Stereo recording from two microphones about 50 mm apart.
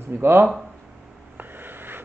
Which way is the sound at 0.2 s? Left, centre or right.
Right.